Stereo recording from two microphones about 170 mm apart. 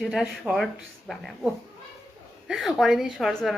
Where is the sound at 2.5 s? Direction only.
Centre (ahead or behind).